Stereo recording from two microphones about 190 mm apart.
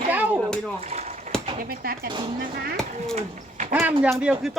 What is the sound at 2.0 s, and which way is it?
Speech, 25° right (ahead or behind).